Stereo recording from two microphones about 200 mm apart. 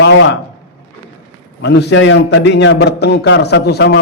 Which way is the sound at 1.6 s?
60° left (ahead or behind).